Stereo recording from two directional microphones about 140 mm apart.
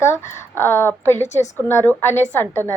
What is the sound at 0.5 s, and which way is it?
A woman's voice, 20° left (ahead or behind).